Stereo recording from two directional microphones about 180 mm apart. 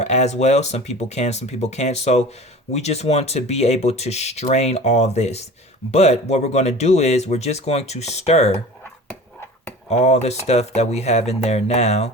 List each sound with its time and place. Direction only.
0.0 s speech: 40° left (ahead or behind)
9.9 s speech: 40° left (ahead or behind)